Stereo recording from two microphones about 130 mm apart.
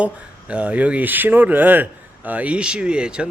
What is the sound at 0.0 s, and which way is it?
Speech, 10° right (ahead or behind).